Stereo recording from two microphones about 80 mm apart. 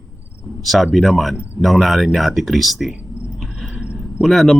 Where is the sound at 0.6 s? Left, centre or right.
Centre.